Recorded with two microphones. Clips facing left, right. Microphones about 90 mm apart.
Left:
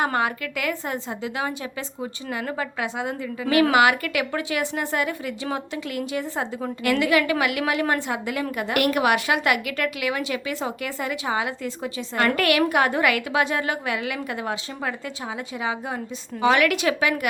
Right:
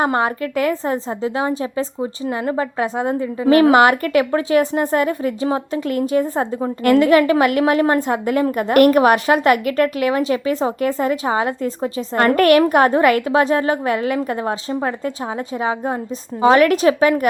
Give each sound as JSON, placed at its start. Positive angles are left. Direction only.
{"t": 0.0, "sound": "a woman's voice", "side_deg": -35}
{"t": 16.4, "sound": "a woman's voice", "side_deg": -40}